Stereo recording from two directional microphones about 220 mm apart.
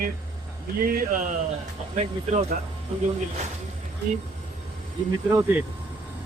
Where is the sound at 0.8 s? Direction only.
40° right (ahead or behind).